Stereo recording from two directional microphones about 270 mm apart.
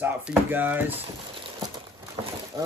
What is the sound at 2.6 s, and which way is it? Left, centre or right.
Speech, centre.